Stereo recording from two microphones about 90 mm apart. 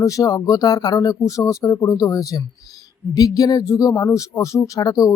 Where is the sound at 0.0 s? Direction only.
40° left (ahead or behind).